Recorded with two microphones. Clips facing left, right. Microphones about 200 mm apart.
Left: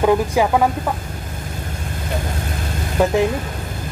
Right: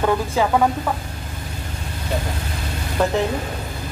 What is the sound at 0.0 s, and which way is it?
Speech, 15° left (ahead or behind).